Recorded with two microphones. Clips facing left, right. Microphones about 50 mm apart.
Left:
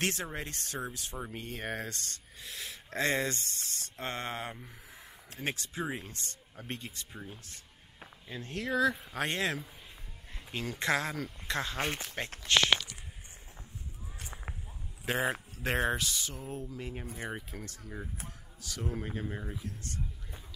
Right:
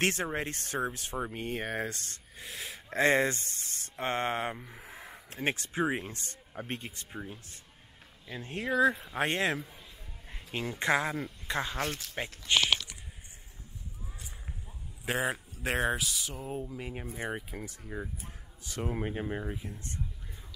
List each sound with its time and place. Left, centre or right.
0.0 s speech: right
1.1 s speech: right
11.8 s speech: left
12.5 s speech: centre
15.0 s speech: centre
18.6 s speech: right